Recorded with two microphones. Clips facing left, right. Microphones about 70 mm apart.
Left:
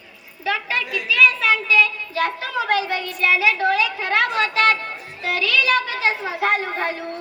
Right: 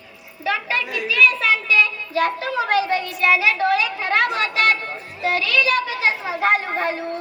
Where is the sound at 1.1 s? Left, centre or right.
Right.